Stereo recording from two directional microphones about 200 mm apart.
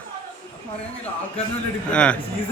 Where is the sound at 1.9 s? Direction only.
5° left (ahead or behind).